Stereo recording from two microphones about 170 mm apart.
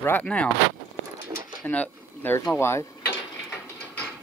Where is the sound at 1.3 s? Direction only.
25° right (ahead or behind).